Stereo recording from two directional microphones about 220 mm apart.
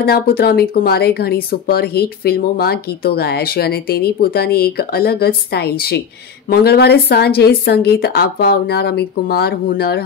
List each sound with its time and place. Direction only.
0.0 s speech: 45° left (ahead or behind)